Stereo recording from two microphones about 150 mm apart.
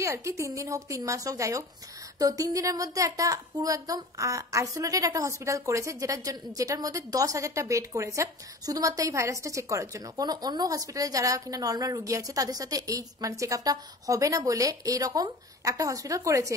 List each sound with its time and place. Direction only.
0.0 s speech: 20° right (ahead or behind)